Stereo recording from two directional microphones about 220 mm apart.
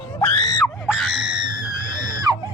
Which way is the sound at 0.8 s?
Centre (ahead or behind).